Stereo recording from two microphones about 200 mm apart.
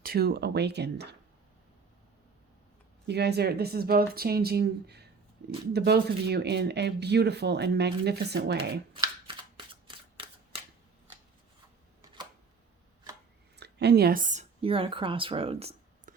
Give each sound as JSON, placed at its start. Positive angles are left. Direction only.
{"t": 0.0, "sound": "speech", "side_deg": -50}
{"t": 3.1, "sound": "speech", "side_deg": -55}
{"t": 13.6, "sound": "a woman's voice", "side_deg": -55}